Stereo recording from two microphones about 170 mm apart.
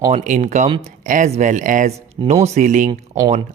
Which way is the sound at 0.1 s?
45° right (ahead or behind).